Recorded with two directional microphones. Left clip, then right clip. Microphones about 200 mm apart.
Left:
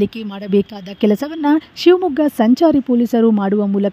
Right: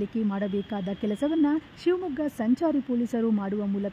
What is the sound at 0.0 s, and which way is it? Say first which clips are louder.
Speech: left 8 dB; 35° left (ahead or behind).